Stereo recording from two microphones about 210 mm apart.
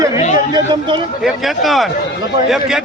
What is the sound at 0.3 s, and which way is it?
Speech, 20° right (ahead or behind).